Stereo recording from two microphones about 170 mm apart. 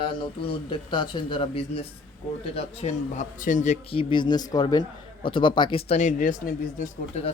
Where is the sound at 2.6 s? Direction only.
45° left (ahead or behind).